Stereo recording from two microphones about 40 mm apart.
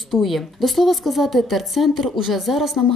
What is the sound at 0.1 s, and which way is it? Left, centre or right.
A woman's voice, centre.